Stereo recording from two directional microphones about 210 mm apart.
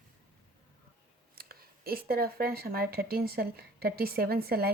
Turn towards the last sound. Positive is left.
turn(degrees=-45)  # may be behind; listen again after turning